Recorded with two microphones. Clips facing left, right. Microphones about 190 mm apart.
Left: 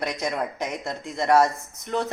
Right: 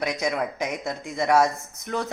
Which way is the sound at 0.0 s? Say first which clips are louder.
Right 1 dB; 5° right (ahead or behind).